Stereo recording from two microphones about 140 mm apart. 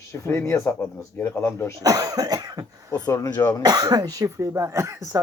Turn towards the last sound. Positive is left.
turn(degrees=-20)  # may be behind; listen again after turning